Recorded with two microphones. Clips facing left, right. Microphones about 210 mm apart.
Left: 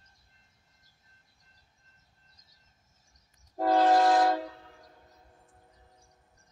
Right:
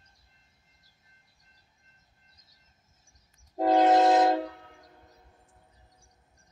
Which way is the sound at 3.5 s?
20° right (ahead or behind).